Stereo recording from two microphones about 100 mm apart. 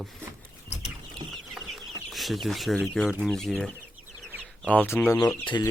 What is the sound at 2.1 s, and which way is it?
Speech, centre (ahead or behind).